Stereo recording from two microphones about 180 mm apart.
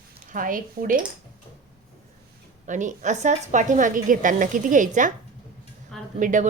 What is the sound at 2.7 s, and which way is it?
A woman's voice, 45° right (ahead or behind).